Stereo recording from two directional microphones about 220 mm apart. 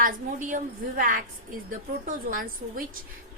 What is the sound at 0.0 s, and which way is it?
A woman's voice, 35° right (ahead or behind).